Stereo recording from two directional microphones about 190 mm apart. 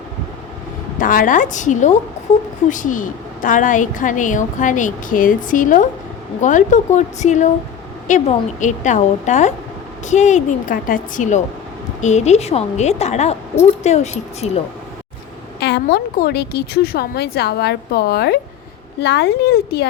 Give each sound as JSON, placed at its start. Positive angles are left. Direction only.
{"t": 0.9, "sound": "a woman's voice", "side_deg": 45}
{"t": 15.6, "sound": "a woman's voice", "side_deg": 55}